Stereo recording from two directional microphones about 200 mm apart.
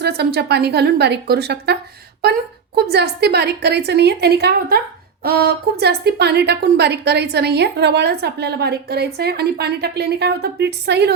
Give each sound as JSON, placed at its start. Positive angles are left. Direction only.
{"t": 0.0, "sound": "a woman's voice", "side_deg": -55}
{"t": 2.9, "sound": "a woman's voice", "side_deg": -55}